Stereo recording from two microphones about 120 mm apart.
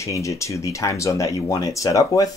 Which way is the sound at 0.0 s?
25° left (ahead or behind).